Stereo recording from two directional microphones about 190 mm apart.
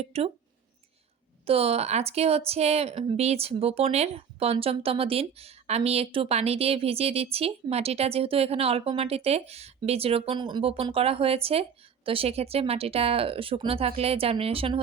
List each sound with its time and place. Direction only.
0.0 s a woman's voice: 30° right (ahead or behind)
1.5 s a woman's voice: 30° right (ahead or behind)